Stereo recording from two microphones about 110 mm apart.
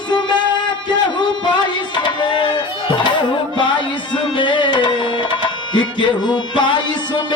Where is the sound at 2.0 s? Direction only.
45° left (ahead or behind).